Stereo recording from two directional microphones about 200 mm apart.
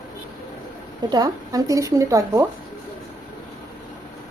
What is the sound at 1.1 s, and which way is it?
Speech, 20° right (ahead or behind).